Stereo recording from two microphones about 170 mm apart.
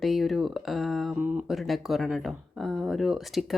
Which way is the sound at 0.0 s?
Centre (ahead or behind).